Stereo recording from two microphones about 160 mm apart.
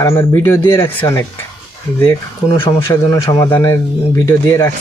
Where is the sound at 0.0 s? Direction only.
20° left (ahead or behind).